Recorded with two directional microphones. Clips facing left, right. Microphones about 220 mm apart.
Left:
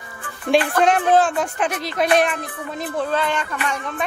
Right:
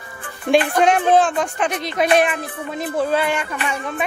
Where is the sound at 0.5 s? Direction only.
30° right (ahead or behind).